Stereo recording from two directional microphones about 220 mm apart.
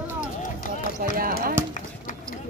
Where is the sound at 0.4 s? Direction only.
35° left (ahead or behind).